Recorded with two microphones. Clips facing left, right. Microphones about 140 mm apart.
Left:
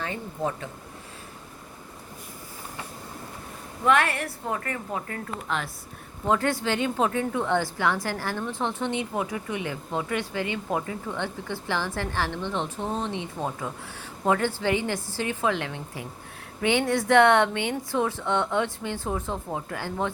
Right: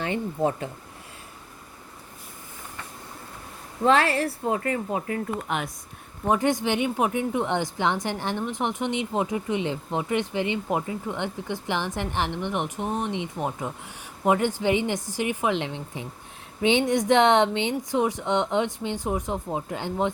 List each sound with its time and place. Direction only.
3.8 s a woman's voice: 30° right (ahead or behind)